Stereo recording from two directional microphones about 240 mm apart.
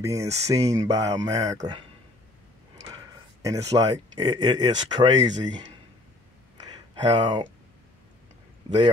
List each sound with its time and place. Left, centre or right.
0.0 s speech: centre
2.9 s speech: centre
6.7 s a sound: centre